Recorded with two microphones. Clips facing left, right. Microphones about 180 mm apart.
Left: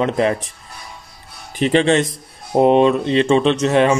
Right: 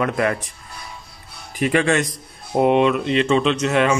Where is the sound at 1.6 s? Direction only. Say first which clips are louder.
Left 4 dB; 25° left (ahead or behind).